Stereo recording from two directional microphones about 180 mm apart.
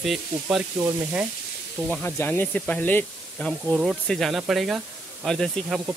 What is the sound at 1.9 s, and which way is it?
Speech, 10° left (ahead or behind).